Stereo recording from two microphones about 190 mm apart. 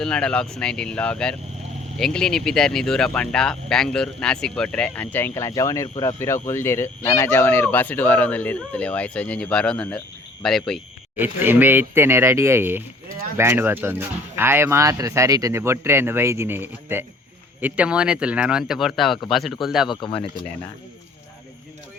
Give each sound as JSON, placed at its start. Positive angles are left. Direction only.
{"t": 0.0, "sound": "speech", "side_deg": 5}
{"t": 11.2, "sound": "speech", "side_deg": -10}
{"t": 19.9, "sound": "speech", "side_deg": 25}